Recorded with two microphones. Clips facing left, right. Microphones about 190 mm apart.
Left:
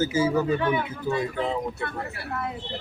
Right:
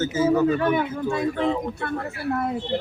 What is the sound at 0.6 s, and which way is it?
Speech, 50° right (ahead or behind).